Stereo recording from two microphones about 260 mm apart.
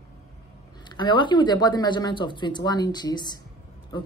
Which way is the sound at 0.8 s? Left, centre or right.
Centre.